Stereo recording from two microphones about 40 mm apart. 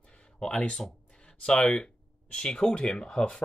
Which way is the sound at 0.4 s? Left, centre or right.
Left.